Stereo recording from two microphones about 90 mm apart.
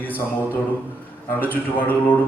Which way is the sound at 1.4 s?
20° left (ahead or behind).